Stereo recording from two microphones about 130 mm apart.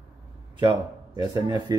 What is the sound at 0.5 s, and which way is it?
Speech, 30° right (ahead or behind).